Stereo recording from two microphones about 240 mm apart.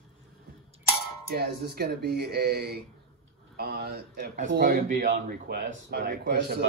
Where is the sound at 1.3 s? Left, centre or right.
Right.